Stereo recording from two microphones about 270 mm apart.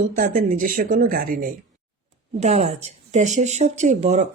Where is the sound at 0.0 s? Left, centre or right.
Right.